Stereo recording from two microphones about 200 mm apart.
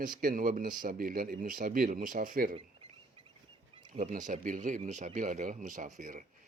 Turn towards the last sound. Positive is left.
turn(degrees=-40)  # may be behind; listen again after turning